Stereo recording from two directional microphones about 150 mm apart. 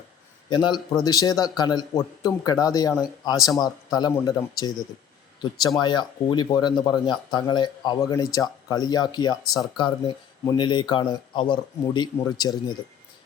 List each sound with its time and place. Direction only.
0.5 s speech: 30° left (ahead or behind)
5.8 s speech: 30° left (ahead or behind)